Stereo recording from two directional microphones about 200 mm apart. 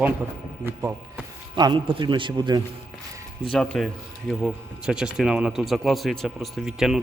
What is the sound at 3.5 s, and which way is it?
Speech, 5° left (ahead or behind).